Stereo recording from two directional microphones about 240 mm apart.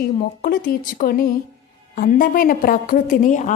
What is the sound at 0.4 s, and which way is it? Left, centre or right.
A woman's voice, left.